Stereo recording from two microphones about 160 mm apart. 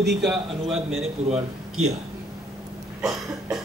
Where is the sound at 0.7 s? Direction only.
40° right (ahead or behind).